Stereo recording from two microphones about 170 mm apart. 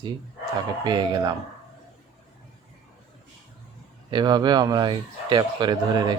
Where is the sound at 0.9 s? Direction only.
25° right (ahead or behind).